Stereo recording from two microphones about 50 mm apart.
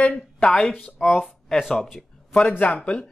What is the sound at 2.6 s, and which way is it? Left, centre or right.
Speech, left.